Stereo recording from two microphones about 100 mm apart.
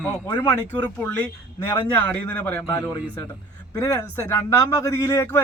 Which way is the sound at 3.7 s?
35° left (ahead or behind).